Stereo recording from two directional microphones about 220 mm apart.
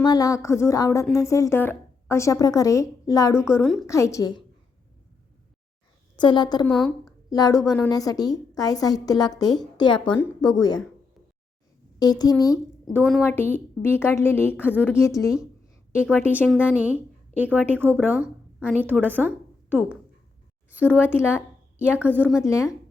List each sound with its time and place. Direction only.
0.0 s speech: 15° left (ahead or behind)
6.1 s a woman's voice: 20° left (ahead or behind)
6.7 s a woman's voice: 5° left (ahead or behind)
7.3 s a woman's voice: 15° left (ahead or behind)
7.6 s a woman's voice: centre (ahead or behind)
7.9 s speech: 15° left (ahead or behind)
11.9 s a woman's voice: 15° left (ahead or behind)
13.0 s a woman's voice: centre (ahead or behind)
13.2 s speech: 10° left (ahead or behind)
16.2 s a woman's voice: 5° right (ahead or behind)
20.7 s a woman's voice: 5° right (ahead or behind)